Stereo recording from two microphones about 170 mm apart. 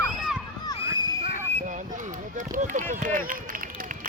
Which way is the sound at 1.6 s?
45° right (ahead or behind).